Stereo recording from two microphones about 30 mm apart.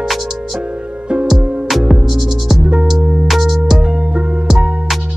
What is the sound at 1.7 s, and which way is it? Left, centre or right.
Music, centre.